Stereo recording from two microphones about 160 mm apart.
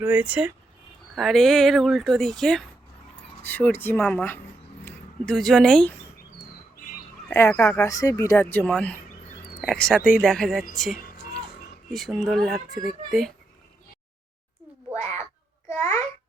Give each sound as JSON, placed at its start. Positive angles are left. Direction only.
{"t": 0.0, "sound": "speech", "side_deg": -10}
{"t": 7.3, "sound": "speech", "side_deg": 15}
{"t": 11.9, "sound": "speech", "side_deg": 0}
{"t": 15.7, "sound": "babbling", "side_deg": 15}